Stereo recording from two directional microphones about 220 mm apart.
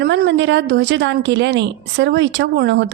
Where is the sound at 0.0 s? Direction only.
50° right (ahead or behind).